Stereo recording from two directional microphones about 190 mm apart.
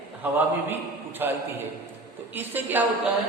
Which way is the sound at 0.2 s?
10° right (ahead or behind).